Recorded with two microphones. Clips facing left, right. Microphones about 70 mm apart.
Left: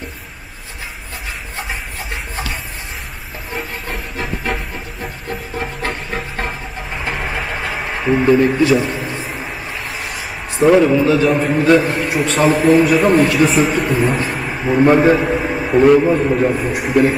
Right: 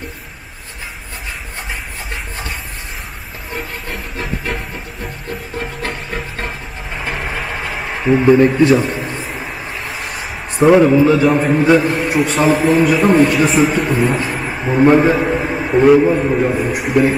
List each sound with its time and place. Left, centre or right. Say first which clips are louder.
3.5 s train: even; centre
7.1 s vehicle: even; centre
7.7 s a sound: right 2 dB; centre
10.8 s a man's voice: right 2 dB; right
11.2 s a man's voice: right 1 dB; centre
11.8 s a man's voice: right 2 dB; centre